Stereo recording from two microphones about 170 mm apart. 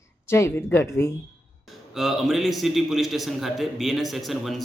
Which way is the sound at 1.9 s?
Centre (ahead or behind).